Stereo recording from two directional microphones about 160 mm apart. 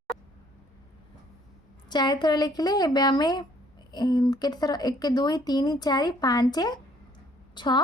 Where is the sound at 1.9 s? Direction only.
25° left (ahead or behind).